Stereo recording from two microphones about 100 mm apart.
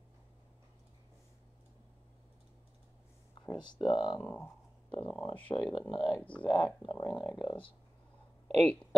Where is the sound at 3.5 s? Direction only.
50° left (ahead or behind).